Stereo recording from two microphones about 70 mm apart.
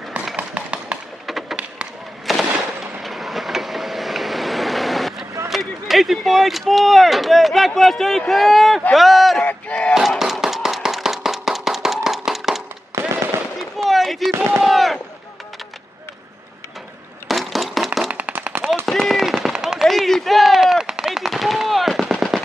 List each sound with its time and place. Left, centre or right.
0.4 s tap: centre
1.2 s a sound: centre
2.3 s machine gun: centre
3.0 s vehicle: centre
5.5 s speech: centre
9.4 s battle cry: centre
9.9 s a sound: centre
17.3 s a sound: centre
18.1 s machine gun: right
18.9 s machine gun: centre